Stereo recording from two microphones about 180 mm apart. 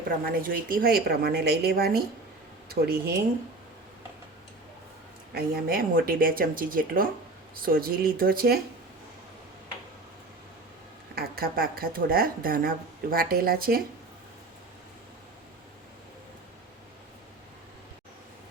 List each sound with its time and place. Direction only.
0.3 s speech: 50° right (ahead or behind)
5.3 s speech: 60° right (ahead or behind)
11.1 s speech: 55° right (ahead or behind)